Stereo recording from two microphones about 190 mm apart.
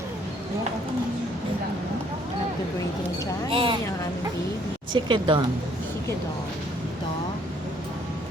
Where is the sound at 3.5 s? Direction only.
25° right (ahead or behind).